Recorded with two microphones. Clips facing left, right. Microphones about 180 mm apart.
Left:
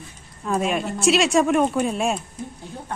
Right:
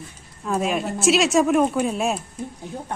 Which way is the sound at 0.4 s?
Centre (ahead or behind).